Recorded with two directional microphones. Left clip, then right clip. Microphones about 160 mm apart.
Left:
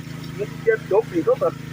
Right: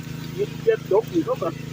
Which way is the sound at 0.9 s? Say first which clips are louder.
Left 3 dB; 35° left (ahead or behind).